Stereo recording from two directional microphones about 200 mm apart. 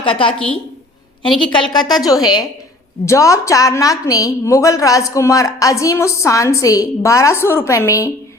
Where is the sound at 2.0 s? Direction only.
20° left (ahead or behind).